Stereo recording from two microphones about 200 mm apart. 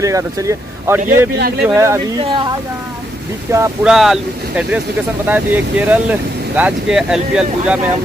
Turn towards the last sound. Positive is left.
turn(degrees=-5)  # may be behind; listen again after turning